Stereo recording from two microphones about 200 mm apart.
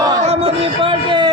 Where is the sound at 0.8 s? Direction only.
20° right (ahead or behind).